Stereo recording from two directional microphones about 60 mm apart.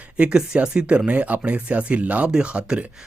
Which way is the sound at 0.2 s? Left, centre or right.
Centre.